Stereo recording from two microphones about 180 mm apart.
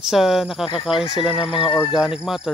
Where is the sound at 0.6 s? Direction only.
30° left (ahead or behind).